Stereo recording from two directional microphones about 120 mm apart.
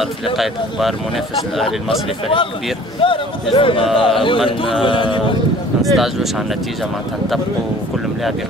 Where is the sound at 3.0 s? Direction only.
45° left (ahead or behind).